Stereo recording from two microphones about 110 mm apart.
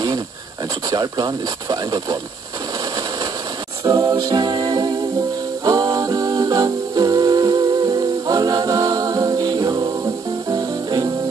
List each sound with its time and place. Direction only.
0.8 s speech: 35° right (ahead or behind)
3.8 s music: 30° right (ahead or behind)